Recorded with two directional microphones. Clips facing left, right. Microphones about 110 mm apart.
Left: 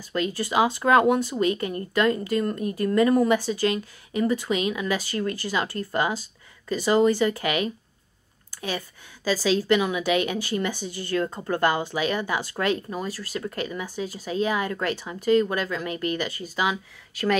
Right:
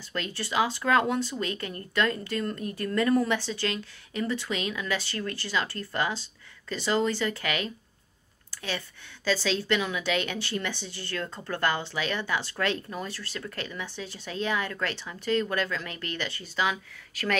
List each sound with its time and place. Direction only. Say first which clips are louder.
0.1 s speech: left 6 dB; 10° left (ahead or behind)